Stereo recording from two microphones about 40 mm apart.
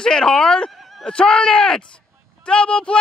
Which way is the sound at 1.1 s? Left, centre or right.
Left.